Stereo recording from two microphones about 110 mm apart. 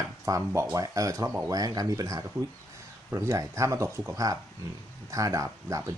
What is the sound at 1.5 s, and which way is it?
Speech, 35° right (ahead or behind).